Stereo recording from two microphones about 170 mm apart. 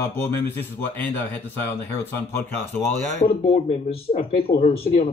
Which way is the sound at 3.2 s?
35° left (ahead or behind).